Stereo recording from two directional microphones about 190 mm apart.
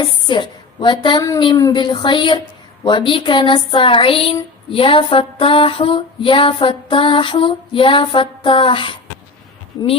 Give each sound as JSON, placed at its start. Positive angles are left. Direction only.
{"t": 0.0, "sound": "a woman's voice", "side_deg": 25}
{"t": 1.4, "sound": "female singing", "side_deg": 20}